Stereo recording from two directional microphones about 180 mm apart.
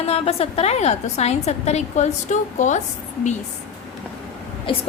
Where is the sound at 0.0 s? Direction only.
35° left (ahead or behind).